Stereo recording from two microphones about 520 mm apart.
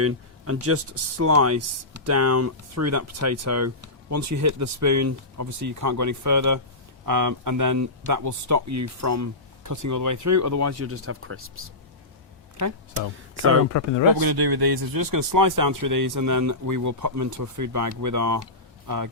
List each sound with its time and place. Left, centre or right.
0.0 s speech: right
13.7 s speech: left
14.2 s speech: right